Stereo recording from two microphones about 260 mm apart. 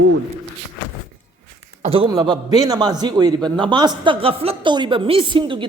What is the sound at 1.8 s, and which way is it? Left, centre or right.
A man's voice, right.